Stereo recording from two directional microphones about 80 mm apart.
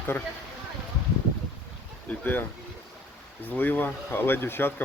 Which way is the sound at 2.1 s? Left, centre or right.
Left.